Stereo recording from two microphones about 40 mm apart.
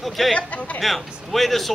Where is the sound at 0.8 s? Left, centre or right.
Centre.